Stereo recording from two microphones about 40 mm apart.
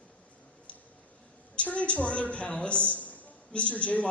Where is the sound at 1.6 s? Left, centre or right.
Left.